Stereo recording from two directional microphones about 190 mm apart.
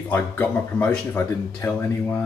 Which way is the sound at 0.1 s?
10° left (ahead or behind).